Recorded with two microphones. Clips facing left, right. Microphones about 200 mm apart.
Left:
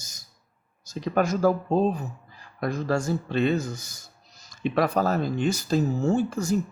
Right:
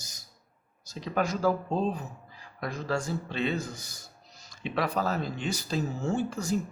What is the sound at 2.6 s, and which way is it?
Speech, 45° left (ahead or behind).